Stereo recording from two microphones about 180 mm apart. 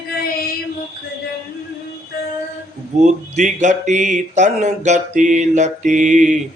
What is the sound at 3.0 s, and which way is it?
Speech, 40° right (ahead or behind).